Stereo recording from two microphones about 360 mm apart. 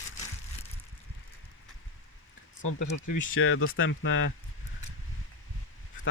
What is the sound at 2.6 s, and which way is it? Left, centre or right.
Speech, left.